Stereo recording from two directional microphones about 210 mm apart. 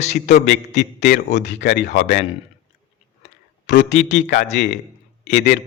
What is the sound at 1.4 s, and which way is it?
Speech, 55° left (ahead or behind).